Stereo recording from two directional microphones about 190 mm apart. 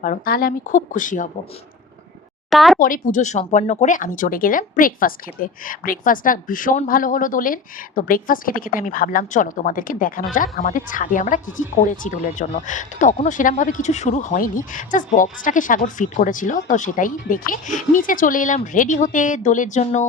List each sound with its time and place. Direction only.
0.0 s speech: 50° left (ahead or behind)
2.5 s speech: centre (ahead or behind)
2.7 s speech: 45° left (ahead or behind)